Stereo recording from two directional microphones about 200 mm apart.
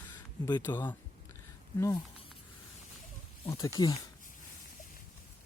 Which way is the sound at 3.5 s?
15° left (ahead or behind).